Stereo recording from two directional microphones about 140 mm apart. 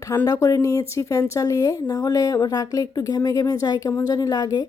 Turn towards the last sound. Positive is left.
turn(degrees=30)  # may be behind; listen again after turning